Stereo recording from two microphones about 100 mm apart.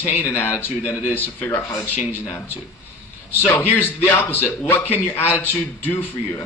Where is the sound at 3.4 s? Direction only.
20° left (ahead or behind).